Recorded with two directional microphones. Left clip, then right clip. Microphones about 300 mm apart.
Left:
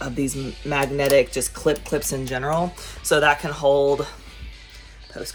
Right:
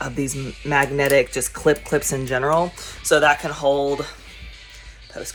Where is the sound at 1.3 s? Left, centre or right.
Right.